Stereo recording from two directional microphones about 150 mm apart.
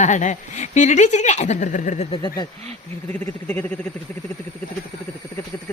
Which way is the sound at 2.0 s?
35° left (ahead or behind).